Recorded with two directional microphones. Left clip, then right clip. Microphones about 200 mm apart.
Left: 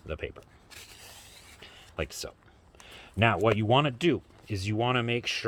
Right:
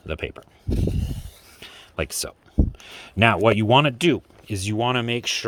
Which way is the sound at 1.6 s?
35° right (ahead or behind).